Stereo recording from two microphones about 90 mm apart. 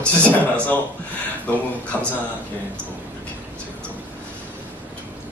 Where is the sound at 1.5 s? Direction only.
15° left (ahead or behind).